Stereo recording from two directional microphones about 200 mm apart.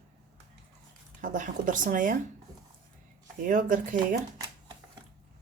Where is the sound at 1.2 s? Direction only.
40° right (ahead or behind).